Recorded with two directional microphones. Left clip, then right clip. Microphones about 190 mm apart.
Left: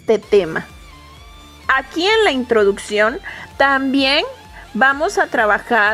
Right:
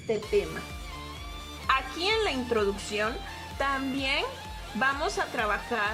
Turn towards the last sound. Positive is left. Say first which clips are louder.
# left 14 dB
turn(degrees=45)  # may be behind; listen again after turning